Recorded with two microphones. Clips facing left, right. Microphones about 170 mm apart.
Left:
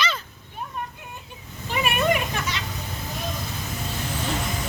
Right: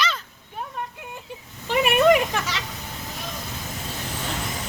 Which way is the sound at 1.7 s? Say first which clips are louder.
Right 6 dB; 90° right.